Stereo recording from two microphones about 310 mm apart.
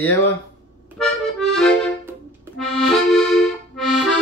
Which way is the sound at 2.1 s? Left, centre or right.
Centre.